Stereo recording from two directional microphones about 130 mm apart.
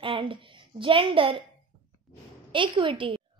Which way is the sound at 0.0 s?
40° right (ahead or behind).